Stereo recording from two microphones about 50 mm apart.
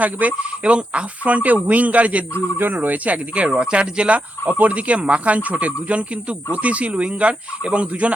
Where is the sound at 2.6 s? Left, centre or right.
Right.